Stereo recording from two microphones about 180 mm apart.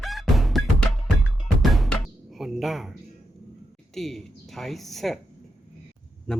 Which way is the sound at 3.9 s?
Centre (ahead or behind).